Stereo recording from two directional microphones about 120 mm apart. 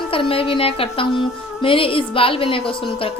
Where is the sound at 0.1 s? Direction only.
50° left (ahead or behind).